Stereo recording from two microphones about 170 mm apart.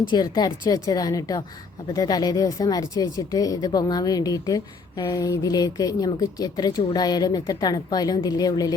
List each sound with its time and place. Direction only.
0.1 s speech: 25° left (ahead or behind)